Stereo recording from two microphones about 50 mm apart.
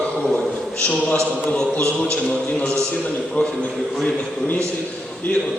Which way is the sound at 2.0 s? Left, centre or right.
Centre.